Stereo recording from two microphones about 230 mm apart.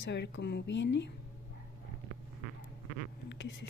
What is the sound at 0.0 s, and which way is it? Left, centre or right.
Speech, left.